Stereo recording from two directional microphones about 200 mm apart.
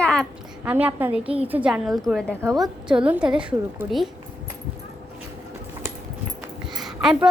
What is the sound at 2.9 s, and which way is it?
A woman's voice, 5° right (ahead or behind).